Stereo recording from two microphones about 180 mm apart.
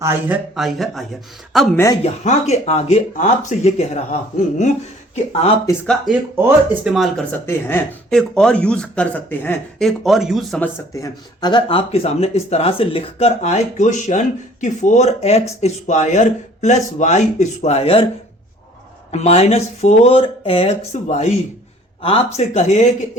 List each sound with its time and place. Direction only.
0.0 s speech: 15° right (ahead or behind)
0.5 s speech: centre (ahead or behind)
1.7 s speech: 15° left (ahead or behind)
2.2 s speech: 40° left (ahead or behind)
5.8 s speech: 5° left (ahead or behind)
10.6 s speech: 20° left (ahead or behind)
19.1 s speech: 35° left (ahead or behind)